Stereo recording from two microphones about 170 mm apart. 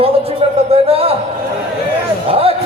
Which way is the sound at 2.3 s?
35° right (ahead or behind).